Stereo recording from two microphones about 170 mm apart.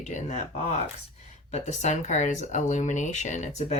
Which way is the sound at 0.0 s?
45° left (ahead or behind).